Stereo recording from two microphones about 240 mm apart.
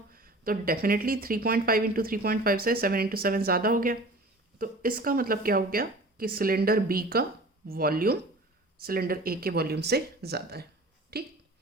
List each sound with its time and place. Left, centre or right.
0.1 s speech: right